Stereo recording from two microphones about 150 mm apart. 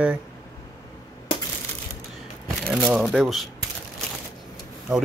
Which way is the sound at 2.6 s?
5° right (ahead or behind).